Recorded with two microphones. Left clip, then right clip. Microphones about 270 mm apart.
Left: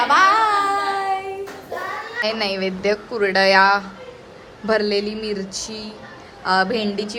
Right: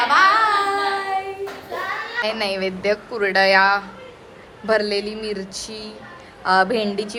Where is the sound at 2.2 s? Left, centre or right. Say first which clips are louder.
Left 1 dB; centre.